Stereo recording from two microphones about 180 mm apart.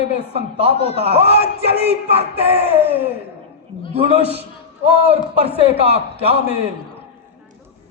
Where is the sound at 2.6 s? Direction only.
10° right (ahead or behind).